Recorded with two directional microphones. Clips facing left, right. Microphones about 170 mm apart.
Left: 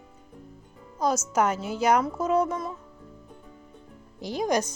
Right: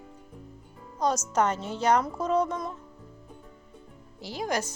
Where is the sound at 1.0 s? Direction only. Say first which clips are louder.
Left 1 dB; 10° left (ahead or behind).